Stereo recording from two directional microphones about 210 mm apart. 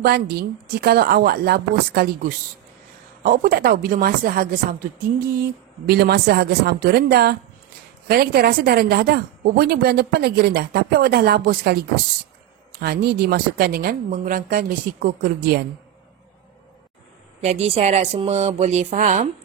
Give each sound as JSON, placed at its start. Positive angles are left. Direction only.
{"t": 0.0, "sound": "a woman's voice", "side_deg": -50}
{"t": 12.8, "sound": "a woman's voice", "side_deg": -50}
{"t": 17.4, "sound": "speech", "side_deg": -30}